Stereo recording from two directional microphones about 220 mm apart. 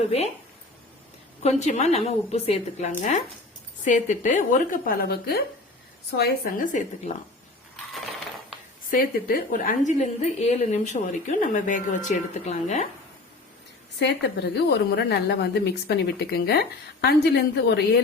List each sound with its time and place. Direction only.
0.0 s speech: 30° left (ahead or behind)
1.4 s a woman's voice: 30° left (ahead or behind)
8.9 s a woman's voice: 40° left (ahead or behind)
14.0 s a woman's voice: 50° left (ahead or behind)